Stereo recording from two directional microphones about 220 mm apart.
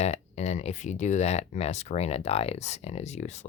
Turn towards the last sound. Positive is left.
turn(degrees=30)  # may be behind; listen again after turning